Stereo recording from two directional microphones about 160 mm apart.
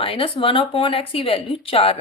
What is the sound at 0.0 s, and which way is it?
Speech, 35° left (ahead or behind).